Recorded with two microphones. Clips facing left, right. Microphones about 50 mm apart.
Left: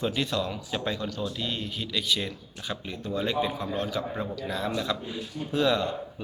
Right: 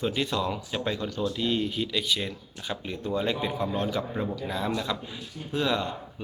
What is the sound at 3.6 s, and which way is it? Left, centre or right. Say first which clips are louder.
Speech: right 2 dB; centre.